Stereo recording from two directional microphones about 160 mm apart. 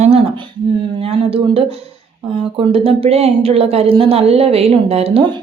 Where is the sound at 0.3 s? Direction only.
35° right (ahead or behind).